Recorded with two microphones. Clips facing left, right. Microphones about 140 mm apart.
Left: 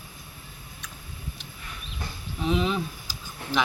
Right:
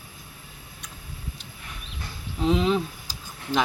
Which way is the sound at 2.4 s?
30° right (ahead or behind).